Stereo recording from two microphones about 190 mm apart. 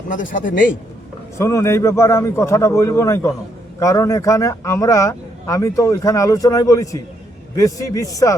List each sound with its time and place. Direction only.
0.1 s a man's voice: 45° left (ahead or behind)
1.4 s a man's voice: 15° left (ahead or behind)